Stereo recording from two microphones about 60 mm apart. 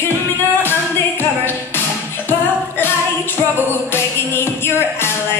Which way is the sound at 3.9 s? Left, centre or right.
Left.